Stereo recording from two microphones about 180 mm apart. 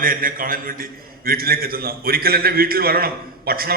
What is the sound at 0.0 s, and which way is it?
A man's voice, 50° right (ahead or behind).